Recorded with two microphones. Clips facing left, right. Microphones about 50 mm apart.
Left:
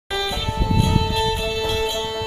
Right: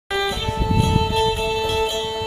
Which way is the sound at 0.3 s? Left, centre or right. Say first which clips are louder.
Right 1 dB; centre.